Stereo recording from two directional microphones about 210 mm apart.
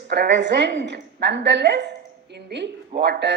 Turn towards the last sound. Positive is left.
turn(degrees=-55)  # may be behind; listen again after turning